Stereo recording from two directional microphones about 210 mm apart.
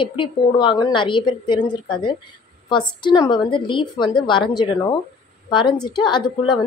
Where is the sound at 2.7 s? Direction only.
20° left (ahead or behind).